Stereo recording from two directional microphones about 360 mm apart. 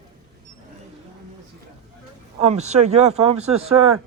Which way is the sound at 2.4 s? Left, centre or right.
Centre.